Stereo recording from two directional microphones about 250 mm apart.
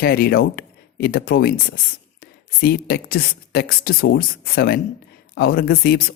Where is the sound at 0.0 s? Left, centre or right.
Left.